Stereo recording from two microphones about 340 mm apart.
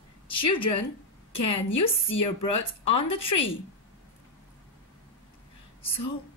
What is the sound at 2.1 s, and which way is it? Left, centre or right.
Speech, centre.